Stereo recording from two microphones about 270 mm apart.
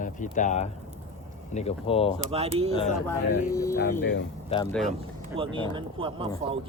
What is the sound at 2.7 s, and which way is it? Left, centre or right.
Speech, centre.